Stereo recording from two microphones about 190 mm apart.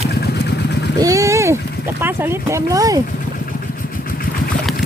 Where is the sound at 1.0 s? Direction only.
15° right (ahead or behind).